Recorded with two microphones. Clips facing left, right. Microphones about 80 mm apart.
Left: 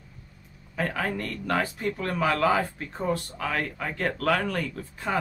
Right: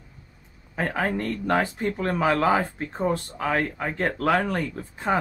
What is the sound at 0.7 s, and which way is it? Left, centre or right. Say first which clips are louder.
Speech: right 3 dB; right.